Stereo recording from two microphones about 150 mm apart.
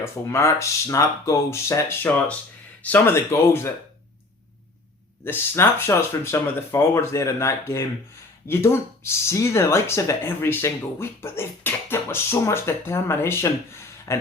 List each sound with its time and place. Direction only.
0.0 s speech: 20° left (ahead or behind)
5.2 s speech: 15° left (ahead or behind)